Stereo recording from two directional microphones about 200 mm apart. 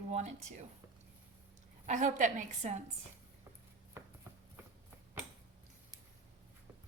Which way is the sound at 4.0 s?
10° right (ahead or behind).